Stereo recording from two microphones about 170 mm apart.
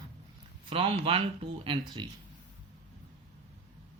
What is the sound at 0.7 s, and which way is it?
Speech, 30° right (ahead or behind).